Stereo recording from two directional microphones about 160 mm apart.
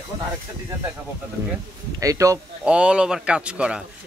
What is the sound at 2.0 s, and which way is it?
Speech, 20° right (ahead or behind).